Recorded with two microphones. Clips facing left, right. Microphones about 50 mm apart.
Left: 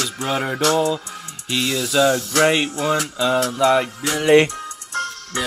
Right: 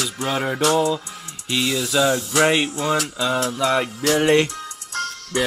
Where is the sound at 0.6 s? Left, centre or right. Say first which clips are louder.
Even; centre.